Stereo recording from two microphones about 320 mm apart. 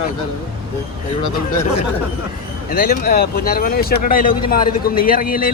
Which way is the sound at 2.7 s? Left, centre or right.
Left.